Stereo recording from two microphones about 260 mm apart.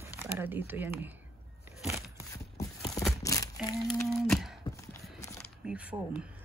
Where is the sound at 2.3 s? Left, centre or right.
Centre.